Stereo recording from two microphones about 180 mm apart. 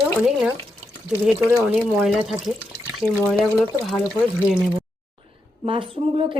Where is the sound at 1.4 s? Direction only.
5° right (ahead or behind).